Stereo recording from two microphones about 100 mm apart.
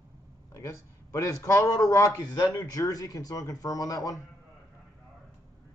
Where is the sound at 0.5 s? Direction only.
30° left (ahead or behind).